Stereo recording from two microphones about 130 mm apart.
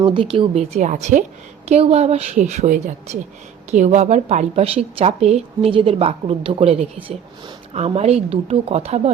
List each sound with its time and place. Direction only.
0.0 s speech: 40° right (ahead or behind); by 1.2 s 70° right (ahead or behind)
1.6 s a woman's voice: 55° right (ahead or behind)